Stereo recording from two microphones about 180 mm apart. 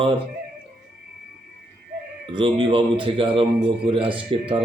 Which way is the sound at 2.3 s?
30° right (ahead or behind).